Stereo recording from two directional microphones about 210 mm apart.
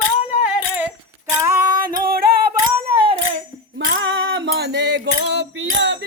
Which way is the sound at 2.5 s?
25° right (ahead or behind).